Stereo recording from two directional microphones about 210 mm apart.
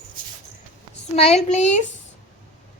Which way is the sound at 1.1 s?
30° left (ahead or behind).